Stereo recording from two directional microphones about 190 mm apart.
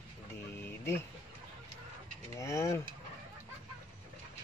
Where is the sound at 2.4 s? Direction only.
15° left (ahead or behind).